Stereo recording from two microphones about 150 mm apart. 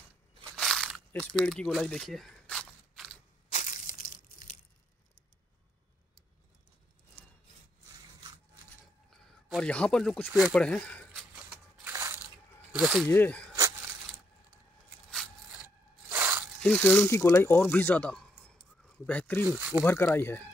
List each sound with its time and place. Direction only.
0.4 s crunch: centre (ahead or behind)
3.4 s crushing: 55° left (ahead or behind)
9.1 s a sound: 5° left (ahead or behind)
10.5 s speech: 5° left (ahead or behind)
11.1 s a sound: 5° right (ahead or behind)
11.9 s crushing: 15° right (ahead or behind)
12.7 s speech: 5° right (ahead or behind)
13.1 s speech: 10° left (ahead or behind)
15.6 s a sound: 15° right (ahead or behind)
16.6 s speech: 10° left (ahead or behind)
19.4 s speech: 10° right (ahead or behind)
19.8 s speech: 15° left (ahead or behind)